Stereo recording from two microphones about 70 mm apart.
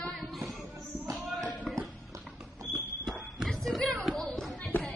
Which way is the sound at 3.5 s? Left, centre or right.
Centre.